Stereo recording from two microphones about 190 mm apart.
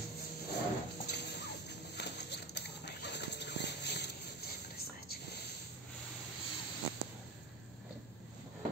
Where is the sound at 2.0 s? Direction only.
60° left (ahead or behind).